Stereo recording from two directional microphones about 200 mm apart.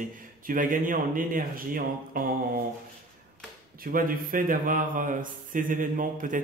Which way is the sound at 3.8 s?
45° right (ahead or behind).